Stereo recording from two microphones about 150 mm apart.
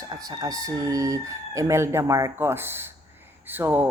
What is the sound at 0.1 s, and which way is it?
Speech, 25° right (ahead or behind).